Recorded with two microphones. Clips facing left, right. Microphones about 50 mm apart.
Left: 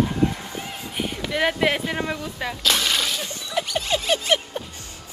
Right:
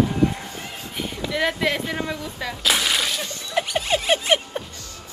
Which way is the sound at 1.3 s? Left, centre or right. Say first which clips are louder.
Left 1 dB; centre.